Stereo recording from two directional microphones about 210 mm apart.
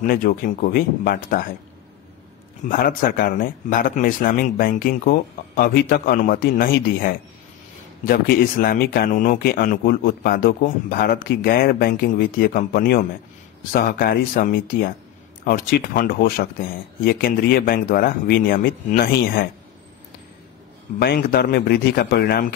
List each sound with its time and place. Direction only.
0.0 s speech: 45° left (ahead or behind)
2.7 s speech: 40° left (ahead or behind)
21.0 s speech: 50° left (ahead or behind)